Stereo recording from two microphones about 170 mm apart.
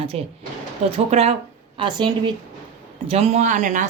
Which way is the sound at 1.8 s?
25° right (ahead or behind).